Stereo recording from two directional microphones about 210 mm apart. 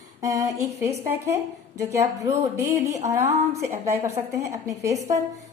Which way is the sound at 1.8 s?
15° right (ahead or behind).